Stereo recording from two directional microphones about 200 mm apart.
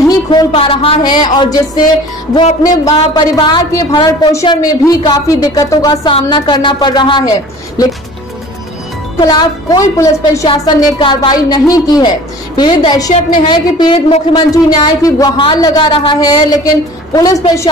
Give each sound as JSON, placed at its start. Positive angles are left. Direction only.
{"t": 0.1, "sound": "speech", "side_deg": 20}
{"t": 2.9, "sound": "a woman's voice", "side_deg": 20}
{"t": 9.2, "sound": "a woman's voice", "side_deg": 20}